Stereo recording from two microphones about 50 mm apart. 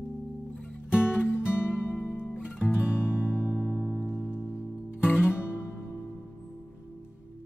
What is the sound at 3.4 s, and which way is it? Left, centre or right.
Music, centre.